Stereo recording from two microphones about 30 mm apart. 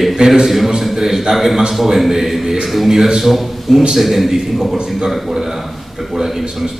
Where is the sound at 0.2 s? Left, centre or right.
Right.